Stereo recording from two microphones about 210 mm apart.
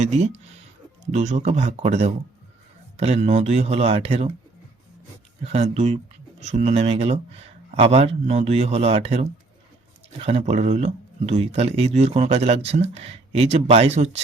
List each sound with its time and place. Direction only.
0.0 s speech: 35° right (ahead or behind)
5.4 s speech: 30° right (ahead or behind)